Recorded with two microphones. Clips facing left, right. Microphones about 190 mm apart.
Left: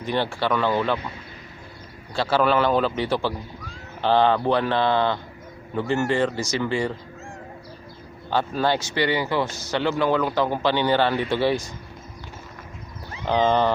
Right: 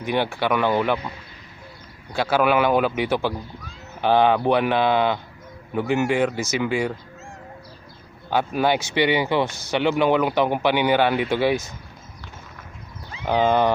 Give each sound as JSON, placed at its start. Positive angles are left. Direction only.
{"t": 0.0, "sound": "a man's voice", "side_deg": -15}
{"t": 2.1, "sound": "a man's voice", "side_deg": -15}
{"t": 8.3, "sound": "a man's voice", "side_deg": -15}
{"t": 13.2, "sound": "a man's voice", "side_deg": -10}